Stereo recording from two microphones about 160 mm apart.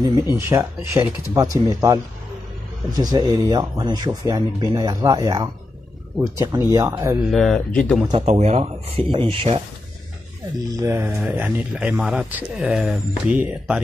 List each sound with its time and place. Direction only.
0.4 s speech: 15° right (ahead or behind)
3.0 s a man's voice: 25° right (ahead or behind)
7.2 s speech: centre (ahead or behind)
8.3 s speech: 40° right (ahead or behind)
10.7 s a man's voice: 20° right (ahead or behind)